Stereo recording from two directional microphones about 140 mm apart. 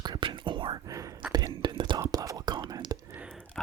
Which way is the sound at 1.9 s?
25° right (ahead or behind).